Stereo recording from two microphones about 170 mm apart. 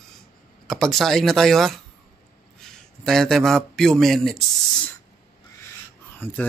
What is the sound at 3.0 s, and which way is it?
A man's voice, 5° left (ahead or behind).